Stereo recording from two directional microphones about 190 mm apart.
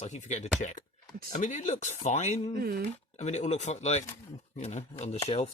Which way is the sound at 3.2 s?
35° left (ahead or behind).